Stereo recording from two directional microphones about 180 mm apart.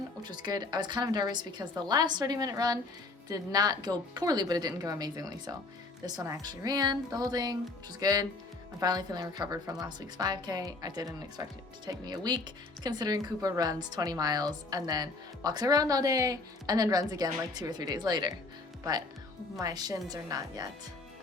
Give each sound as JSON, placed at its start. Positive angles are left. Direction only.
{"t": 0.2, "sound": "a woman's voice", "side_deg": -25}
{"t": 19.5, "sound": "a woman's voice", "side_deg": -20}